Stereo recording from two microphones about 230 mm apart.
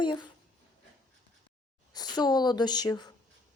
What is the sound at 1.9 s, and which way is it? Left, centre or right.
A woman's voice, centre.